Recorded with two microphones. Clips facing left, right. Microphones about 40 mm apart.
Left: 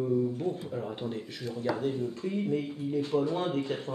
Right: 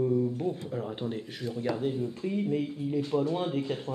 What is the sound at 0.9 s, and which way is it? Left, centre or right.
Speech, centre.